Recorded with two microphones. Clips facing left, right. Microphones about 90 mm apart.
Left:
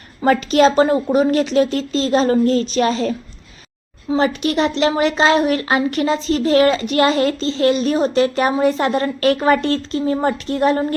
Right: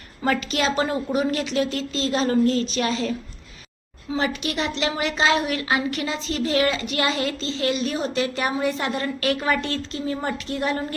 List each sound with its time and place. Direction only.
0.2 s a woman's voice: 35° left (ahead or behind)